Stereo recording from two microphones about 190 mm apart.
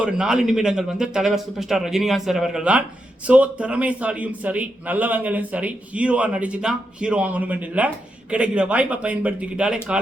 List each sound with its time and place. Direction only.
0.0 s a man's voice: 5° right (ahead or behind)